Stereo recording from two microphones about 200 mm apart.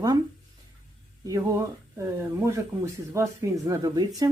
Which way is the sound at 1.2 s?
15° right (ahead or behind).